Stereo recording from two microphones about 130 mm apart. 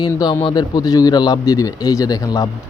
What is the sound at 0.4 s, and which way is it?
A man's voice, 30° left (ahead or behind).